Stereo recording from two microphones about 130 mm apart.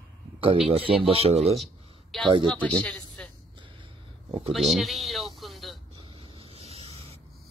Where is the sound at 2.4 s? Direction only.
10° left (ahead or behind).